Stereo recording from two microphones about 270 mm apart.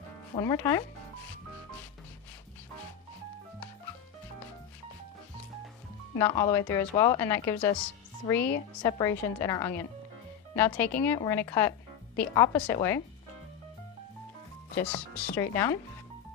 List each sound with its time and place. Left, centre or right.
0.3 s speech: centre
6.1 s speech: centre
15.1 s speech: centre